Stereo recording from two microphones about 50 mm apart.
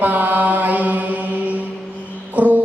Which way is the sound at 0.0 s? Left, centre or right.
Right.